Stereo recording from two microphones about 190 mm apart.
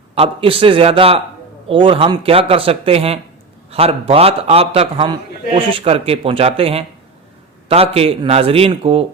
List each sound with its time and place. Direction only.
0.2 s a man's voice: 30° right (ahead or behind)